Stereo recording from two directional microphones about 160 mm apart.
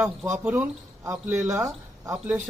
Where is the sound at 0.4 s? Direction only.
10° right (ahead or behind).